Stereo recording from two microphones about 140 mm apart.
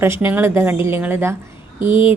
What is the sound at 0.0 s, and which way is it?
A woman's voice, 15° right (ahead or behind).